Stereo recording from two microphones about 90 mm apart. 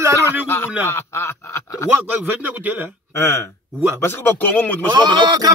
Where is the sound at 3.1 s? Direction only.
25° left (ahead or behind).